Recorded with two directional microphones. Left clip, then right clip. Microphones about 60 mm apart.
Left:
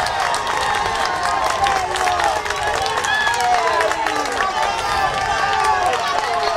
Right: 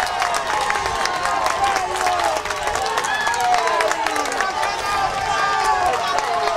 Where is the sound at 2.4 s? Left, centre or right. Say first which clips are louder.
Left 2 dB; centre.